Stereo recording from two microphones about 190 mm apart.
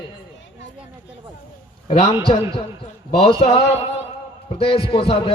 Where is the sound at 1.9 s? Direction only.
35° left (ahead or behind).